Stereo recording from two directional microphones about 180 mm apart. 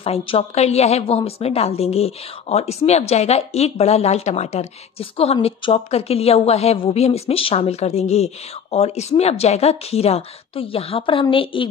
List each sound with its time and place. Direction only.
0.0 s a woman's voice: 35° left (ahead or behind)